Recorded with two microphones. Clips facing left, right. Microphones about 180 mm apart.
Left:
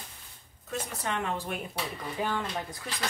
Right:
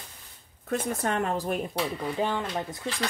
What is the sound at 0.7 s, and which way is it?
Speech, 50° right (ahead or behind).